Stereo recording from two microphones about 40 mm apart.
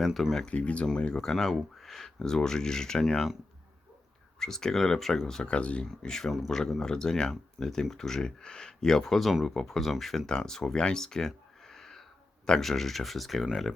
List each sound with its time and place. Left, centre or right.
0.0 s speech: centre
0.5 s speech: left
0.9 s speech: centre
1.2 s speech: centre
4.4 s speech: centre
5.5 s speech: left
5.8 s speech: centre
10.2 s speech: centre